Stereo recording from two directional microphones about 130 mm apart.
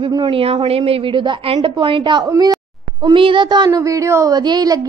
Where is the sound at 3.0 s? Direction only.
40° right (ahead or behind).